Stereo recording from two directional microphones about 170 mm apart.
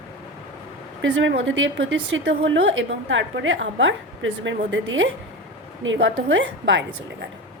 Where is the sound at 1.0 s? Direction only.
90° right.